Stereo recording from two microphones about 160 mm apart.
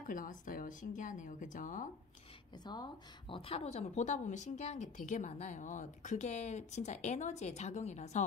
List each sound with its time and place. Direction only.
0.0 s speech: 60° left (ahead or behind)
2.5 s a woman's voice: 25° left (ahead or behind); by 8.3 s 45° left (ahead or behind)